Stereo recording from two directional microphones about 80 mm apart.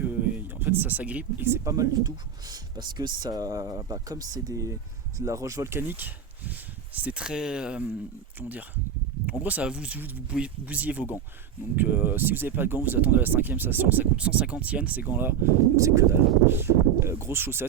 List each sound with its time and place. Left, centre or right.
0.0 s a sound: right
1.5 s speech: right
1.7 s speech: right; by 7.9 s centre
8.4 s speech: right
15.7 s speech: right